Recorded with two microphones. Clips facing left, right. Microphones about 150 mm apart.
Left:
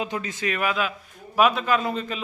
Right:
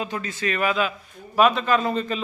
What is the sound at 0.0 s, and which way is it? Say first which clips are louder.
A man's voice: even; 15° left (ahead or behind).